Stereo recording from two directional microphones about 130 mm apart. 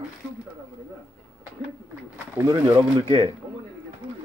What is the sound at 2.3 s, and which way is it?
Speech, 30° right (ahead or behind).